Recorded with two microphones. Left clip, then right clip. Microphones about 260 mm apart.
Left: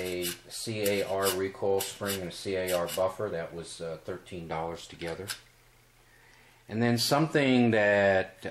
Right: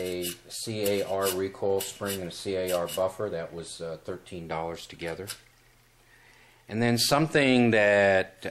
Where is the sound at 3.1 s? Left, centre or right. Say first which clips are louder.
Right 1 dB; centre.